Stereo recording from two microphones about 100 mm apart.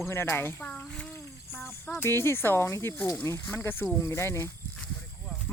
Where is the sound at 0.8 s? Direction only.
10° left (ahead or behind).